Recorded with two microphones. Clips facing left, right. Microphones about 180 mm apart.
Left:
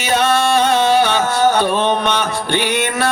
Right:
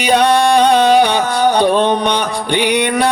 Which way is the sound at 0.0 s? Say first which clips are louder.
Right 4 dB; 15° right (ahead or behind).